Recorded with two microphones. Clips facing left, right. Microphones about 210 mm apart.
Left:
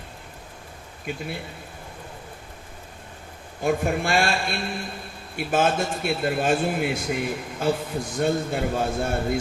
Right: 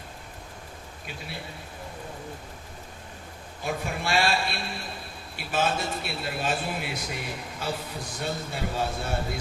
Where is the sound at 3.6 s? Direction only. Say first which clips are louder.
Left 8 dB; 50° left (ahead or behind).